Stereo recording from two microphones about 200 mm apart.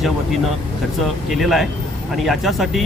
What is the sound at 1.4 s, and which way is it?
Speech, centre (ahead or behind).